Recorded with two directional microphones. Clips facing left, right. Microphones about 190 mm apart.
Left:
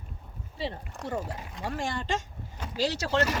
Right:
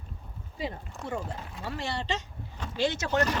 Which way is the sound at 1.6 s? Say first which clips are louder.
Left 1 dB; 45° left (ahead or behind).